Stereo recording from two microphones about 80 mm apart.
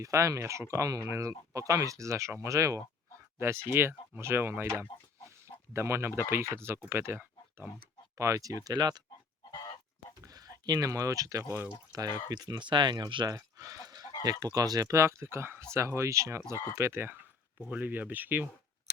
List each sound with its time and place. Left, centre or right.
0.0 s speech: right
4.9 s speech: left
5.7 s speech: right
8.2 s speech: right
10.2 s speech: right
12.3 s speech: right
13.2 s fowl: right
14.3 s speech: right